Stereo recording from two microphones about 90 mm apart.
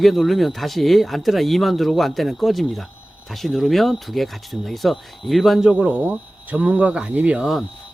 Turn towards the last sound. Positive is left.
turn(degrees=-15)  # may be behind; listen again after turning